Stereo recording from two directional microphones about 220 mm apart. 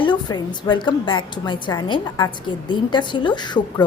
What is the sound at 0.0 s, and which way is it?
A woman's voice, 20° left (ahead or behind).